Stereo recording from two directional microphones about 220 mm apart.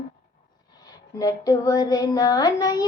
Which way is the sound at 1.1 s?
15° left (ahead or behind).